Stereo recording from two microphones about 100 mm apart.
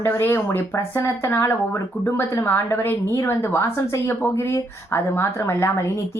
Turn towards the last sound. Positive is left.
turn(degrees=30)  # may be behind; listen again after turning